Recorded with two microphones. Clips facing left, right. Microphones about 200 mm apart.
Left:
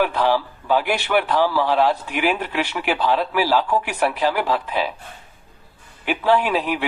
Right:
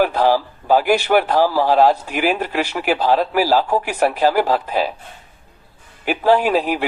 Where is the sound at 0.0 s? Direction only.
40° right (ahead or behind).